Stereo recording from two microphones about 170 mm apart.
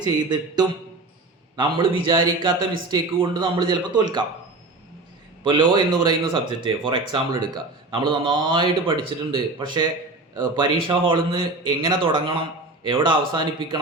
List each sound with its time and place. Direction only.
0.0 s speech: 25° right (ahead or behind)
5.4 s a man's voice: 25° right (ahead or behind)